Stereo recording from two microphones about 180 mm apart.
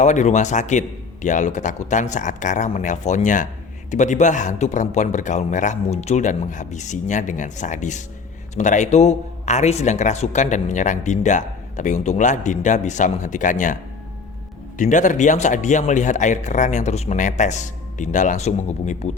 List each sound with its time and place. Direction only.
0.0 s speech: 40° left (ahead or behind)
14.8 s speech: 45° left (ahead or behind)